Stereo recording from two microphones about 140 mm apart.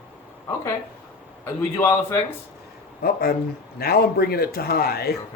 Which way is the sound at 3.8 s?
90° left.